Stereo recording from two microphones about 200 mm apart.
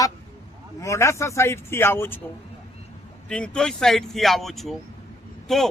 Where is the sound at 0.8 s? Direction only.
15° left (ahead or behind).